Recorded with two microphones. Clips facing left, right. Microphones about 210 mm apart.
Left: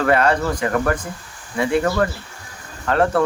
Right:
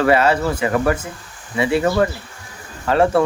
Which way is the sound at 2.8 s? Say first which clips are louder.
Right 2 dB; 10° right (ahead or behind).